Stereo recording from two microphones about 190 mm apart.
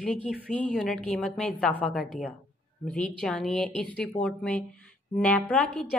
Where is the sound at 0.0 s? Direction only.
5° left (ahead or behind).